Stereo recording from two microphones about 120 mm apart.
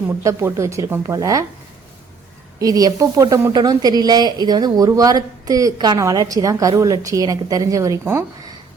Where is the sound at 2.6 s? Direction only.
30° right (ahead or behind).